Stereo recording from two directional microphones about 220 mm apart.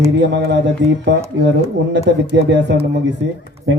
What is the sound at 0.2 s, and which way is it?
Speech, 50° right (ahead or behind).